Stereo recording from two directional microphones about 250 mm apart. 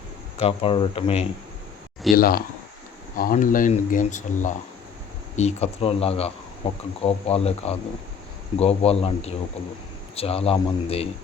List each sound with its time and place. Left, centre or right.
0.3 s speech: left
2.1 s speech: left